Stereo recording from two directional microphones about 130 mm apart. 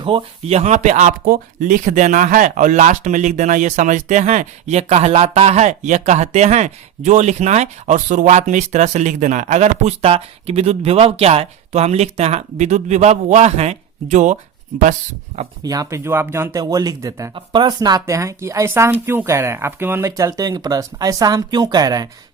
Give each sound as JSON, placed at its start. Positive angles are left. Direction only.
{"t": 0.0, "sound": "speech", "side_deg": -40}
{"t": 15.6, "sound": "speech", "side_deg": -25}
{"t": 17.3, "sound": "speech", "side_deg": -35}